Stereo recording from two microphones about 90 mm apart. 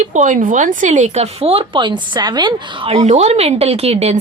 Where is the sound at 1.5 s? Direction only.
75° right (ahead or behind).